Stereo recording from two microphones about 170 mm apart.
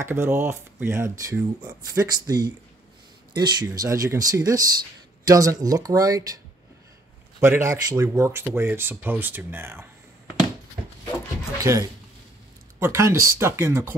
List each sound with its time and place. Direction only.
0.0 s speech: 15° right (ahead or behind)
11.6 s speech: 20° right (ahead or behind)